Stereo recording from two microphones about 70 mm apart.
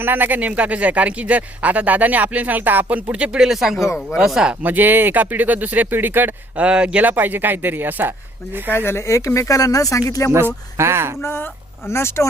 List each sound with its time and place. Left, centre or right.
0.0 s speech: right; by 4.5 s centre
4.6 s speech: right
6.7 s speech: centre
8.7 s speech: left
10.3 s speech: right
11.2 s speech: left